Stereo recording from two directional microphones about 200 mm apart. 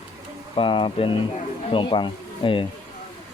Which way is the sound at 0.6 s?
25° left (ahead or behind).